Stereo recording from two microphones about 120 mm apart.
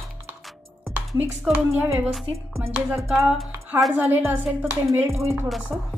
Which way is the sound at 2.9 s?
20° right (ahead or behind).